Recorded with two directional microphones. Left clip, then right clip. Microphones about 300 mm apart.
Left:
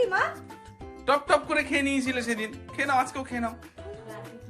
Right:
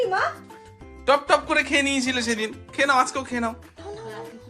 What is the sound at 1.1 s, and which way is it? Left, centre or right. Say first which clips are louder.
Speech: right 4 dB; centre.